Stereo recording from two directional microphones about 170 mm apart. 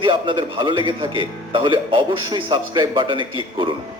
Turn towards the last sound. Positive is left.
turn(degrees=-30)  # may be behind; listen again after turning